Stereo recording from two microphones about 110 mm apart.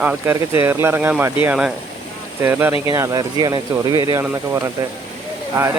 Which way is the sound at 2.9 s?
30° right (ahead or behind).